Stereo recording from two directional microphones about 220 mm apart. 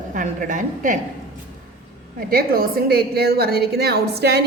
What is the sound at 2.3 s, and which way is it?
A woman's voice, 45° right (ahead or behind).